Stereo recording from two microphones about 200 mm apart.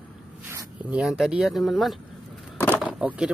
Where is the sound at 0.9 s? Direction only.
5° right (ahead or behind).